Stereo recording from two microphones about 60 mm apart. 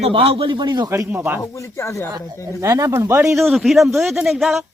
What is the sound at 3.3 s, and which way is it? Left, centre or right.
A man's voice, centre.